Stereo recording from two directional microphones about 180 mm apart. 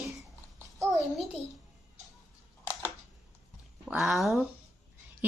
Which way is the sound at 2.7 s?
15° left (ahead or behind).